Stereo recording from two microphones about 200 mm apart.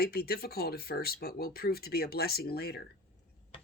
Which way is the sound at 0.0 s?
50° left (ahead or behind).